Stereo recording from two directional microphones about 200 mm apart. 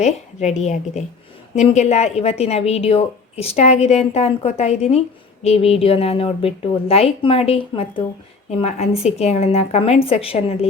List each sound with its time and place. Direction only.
0.0 s a woman's voice: 35° left (ahead or behind)